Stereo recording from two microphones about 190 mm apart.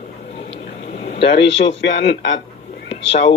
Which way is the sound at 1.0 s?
30° left (ahead or behind).